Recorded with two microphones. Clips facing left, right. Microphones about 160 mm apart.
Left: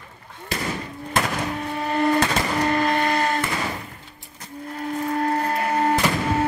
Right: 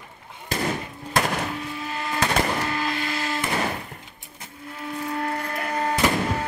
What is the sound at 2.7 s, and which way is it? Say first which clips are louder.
Printer: left 7 dB; 55° left (ahead or behind).